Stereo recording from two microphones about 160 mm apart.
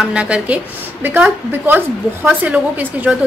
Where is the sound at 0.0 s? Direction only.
5° right (ahead or behind).